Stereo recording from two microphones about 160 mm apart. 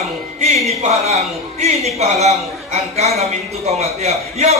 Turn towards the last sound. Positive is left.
turn(degrees=-40)  # may be behind; listen again after turning